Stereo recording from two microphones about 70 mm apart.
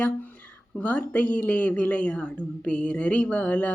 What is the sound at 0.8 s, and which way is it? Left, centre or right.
Speech, centre.